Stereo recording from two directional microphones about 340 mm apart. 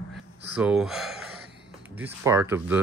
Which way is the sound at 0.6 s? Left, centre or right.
Centre.